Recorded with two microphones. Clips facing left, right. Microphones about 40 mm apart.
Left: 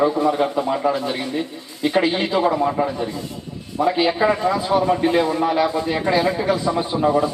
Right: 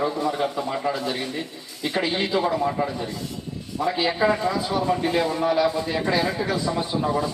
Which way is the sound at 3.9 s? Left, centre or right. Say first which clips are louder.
Left 3 dB; centre.